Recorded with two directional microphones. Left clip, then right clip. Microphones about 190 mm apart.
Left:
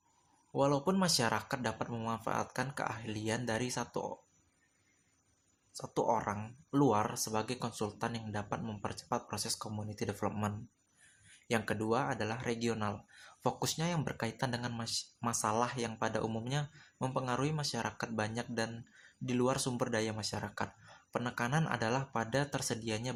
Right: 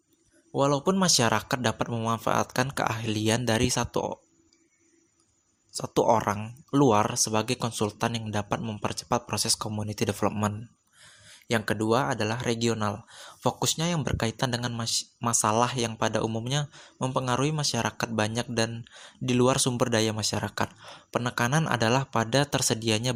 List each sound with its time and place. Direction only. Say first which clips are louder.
0.5 s speech: right 7 dB; 35° right (ahead or behind)
5.7 s speech: right 10 dB; 40° right (ahead or behind)